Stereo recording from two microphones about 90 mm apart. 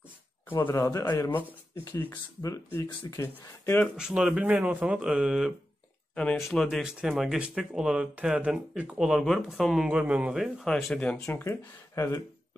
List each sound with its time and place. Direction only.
0.5 s speech: 25° left (ahead or behind)
0.7 s speech: 35° left (ahead or behind)
1.9 s speech: 25° left (ahead or behind)
2.5 s speech: 40° left (ahead or behind)
3.9 s speech: 5° right (ahead or behind)
6.3 s speech: centre (ahead or behind)
9.8 s speech: 15° right (ahead or behind)
10.7 s speech: 5° left (ahead or behind)
11.3 s speech: 35° left (ahead or behind)